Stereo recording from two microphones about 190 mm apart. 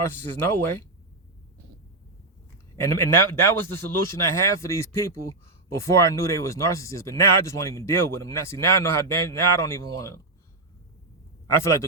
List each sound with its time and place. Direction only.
2.8 s speech: 15° left (ahead or behind)
11.4 s speech: 15° left (ahead or behind)